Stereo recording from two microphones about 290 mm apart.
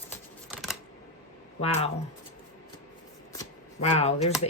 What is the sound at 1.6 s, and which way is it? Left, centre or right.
Speech, left.